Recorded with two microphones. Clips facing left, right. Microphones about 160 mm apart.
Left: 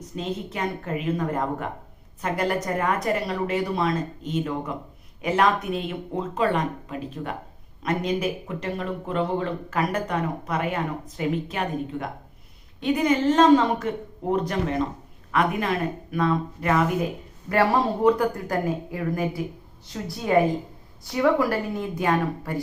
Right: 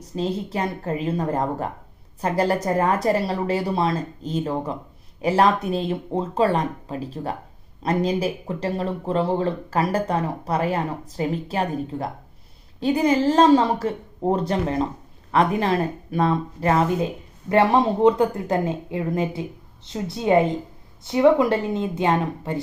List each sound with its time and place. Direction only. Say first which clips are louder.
0.2 s a woman's voice: right 4 dB; 35° right (ahead or behind)